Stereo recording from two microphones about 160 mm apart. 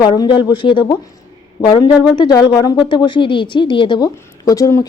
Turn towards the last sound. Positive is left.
turn(degrees=20)  # may be behind; listen again after turning